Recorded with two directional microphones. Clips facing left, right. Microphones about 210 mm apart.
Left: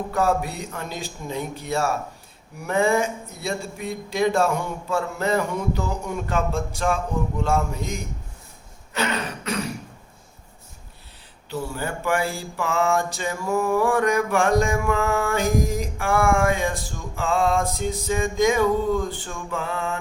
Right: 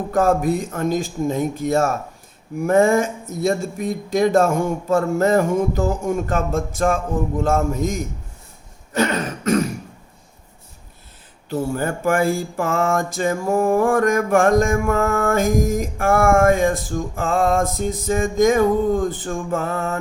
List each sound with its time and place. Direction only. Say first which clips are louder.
0.1 s mantra: right 7 dB; 45° right (ahead or behind)
8.9 s throat clearing: right 6 dB; 45° right (ahead or behind)
11.4 s mantra: right 7 dB; 50° right (ahead or behind)